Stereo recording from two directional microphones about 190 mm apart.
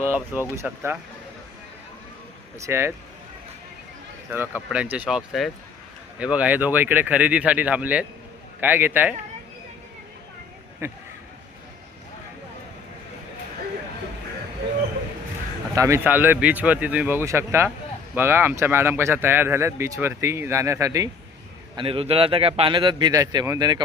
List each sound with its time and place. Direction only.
0.1 s speech: 10° right (ahead or behind)
2.6 s speech: 15° right (ahead or behind)
4.3 s speech: 10° right (ahead or behind)
10.8 s speech: 15° right (ahead or behind)
15.7 s speech: 15° right (ahead or behind)
21.8 s a man's voice: 30° right (ahead or behind)